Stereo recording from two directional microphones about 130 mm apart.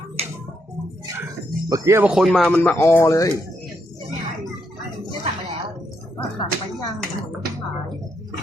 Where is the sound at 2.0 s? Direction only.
5° right (ahead or behind); by 3.3 s 25° left (ahead or behind).